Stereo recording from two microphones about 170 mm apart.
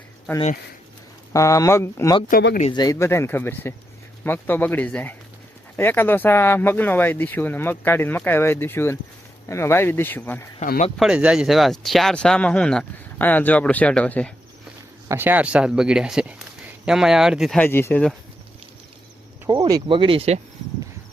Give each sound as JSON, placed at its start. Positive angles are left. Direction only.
{"t": 1.3, "sound": "speech", "side_deg": 20}
{"t": 10.6, "sound": "speech", "side_deg": 45}
{"t": 10.9, "sound": "speech", "side_deg": -5}
{"t": 15.0, "sound": "speech", "side_deg": -15}
{"t": 17.6, "sound": "speech", "side_deg": 15}
{"t": 19.5, "sound": "speech", "side_deg": -20}